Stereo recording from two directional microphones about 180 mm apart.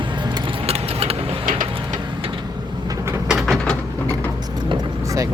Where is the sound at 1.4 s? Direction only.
50° right (ahead or behind).